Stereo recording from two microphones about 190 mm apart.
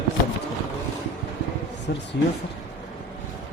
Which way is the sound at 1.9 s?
60° left (ahead or behind).